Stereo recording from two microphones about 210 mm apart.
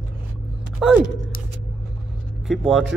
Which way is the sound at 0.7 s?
Centre (ahead or behind).